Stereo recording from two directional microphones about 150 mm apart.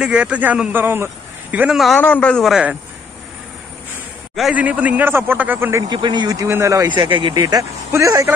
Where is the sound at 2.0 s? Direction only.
10° left (ahead or behind).